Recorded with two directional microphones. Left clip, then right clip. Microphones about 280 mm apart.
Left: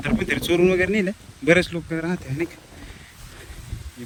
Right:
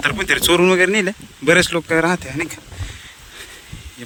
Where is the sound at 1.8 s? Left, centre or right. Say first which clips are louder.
Right 11 dB; right.